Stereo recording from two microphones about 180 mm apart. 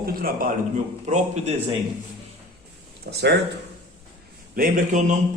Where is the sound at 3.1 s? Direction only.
75° right (ahead or behind).